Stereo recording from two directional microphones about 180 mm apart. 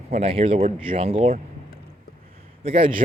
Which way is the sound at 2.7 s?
30° right (ahead or behind).